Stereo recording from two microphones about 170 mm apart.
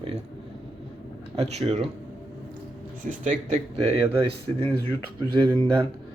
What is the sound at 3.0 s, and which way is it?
Speech, 50° right (ahead or behind).